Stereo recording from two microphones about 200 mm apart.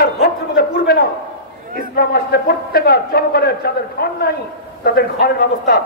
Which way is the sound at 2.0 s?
50° left (ahead or behind).